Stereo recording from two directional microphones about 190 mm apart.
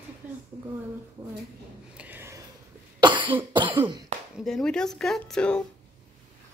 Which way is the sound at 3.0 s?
25° right (ahead or behind).